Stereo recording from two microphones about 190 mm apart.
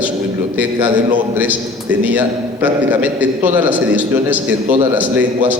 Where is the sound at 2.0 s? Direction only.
10° right (ahead or behind).